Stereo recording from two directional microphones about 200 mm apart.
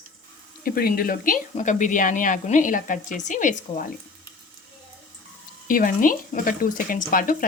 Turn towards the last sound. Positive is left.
turn(degrees=45)  # may be behind; listen again after turning